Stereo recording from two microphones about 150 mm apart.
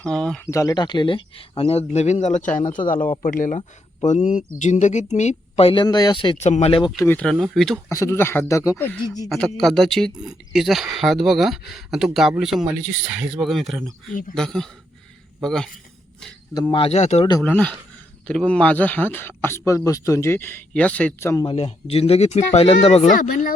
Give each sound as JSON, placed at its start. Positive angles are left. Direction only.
{"t": 0.0, "sound": "speech", "side_deg": 5}
{"t": 0.4, "sound": "speech", "side_deg": 20}
{"t": 3.2, "sound": "speech", "side_deg": 65}
{"t": 6.4, "sound": "speech", "side_deg": 45}
{"t": 6.9, "sound": "speech", "side_deg": 15}
{"t": 7.3, "sound": "speech", "side_deg": 0}
{"t": 7.9, "sound": "speech", "side_deg": 20}
{"t": 9.3, "sound": "speech", "side_deg": 0}
{"t": 16.6, "sound": "speech", "side_deg": 25}
{"t": 16.8, "sound": "speech", "side_deg": 45}
{"t": 17.4, "sound": "speech", "side_deg": 10}
{"t": 21.4, "sound": "speech", "side_deg": 40}
{"t": 23.0, "sound": "speech", "side_deg": 60}